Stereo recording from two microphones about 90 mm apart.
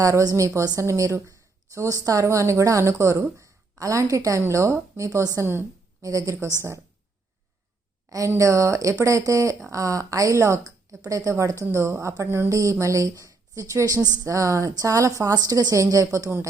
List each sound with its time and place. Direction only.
0.0 s a woman's voice: 40° right (ahead or behind)
8.4 s a woman's voice: 35° right (ahead or behind)